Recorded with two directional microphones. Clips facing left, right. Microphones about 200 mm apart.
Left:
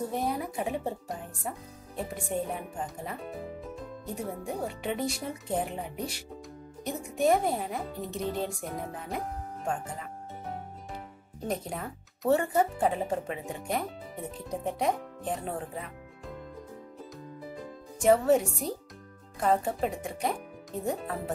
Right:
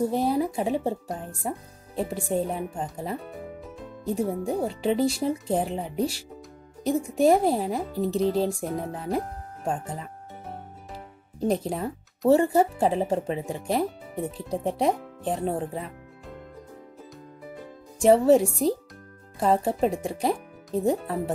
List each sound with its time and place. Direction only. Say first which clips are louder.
0.1 s speech: right 7 dB; 30° right (ahead or behind)
2.0 s speech: right 6 dB; 30° right (ahead or behind)
11.3 s speech: right 8 dB; 30° right (ahead or behind)
18.0 s speech: right 5 dB; 30° right (ahead or behind)